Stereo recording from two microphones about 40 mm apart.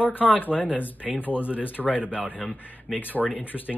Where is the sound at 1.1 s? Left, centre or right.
Left.